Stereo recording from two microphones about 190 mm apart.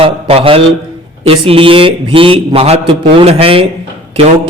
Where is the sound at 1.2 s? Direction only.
30° right (ahead or behind).